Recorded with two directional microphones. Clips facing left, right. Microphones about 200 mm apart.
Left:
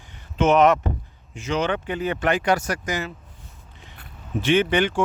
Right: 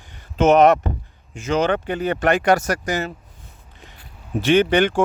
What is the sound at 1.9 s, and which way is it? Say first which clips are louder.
Speech: right 3 dB; 70° right (ahead or behind).